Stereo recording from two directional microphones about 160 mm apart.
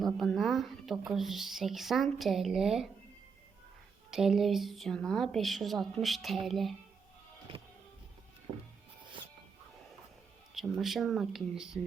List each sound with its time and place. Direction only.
0.0 s speech: centre (ahead or behind)
4.1 s speech: 5° right (ahead or behind)
9.2 s music: 30° right (ahead or behind)
10.5 s speech: centre (ahead or behind)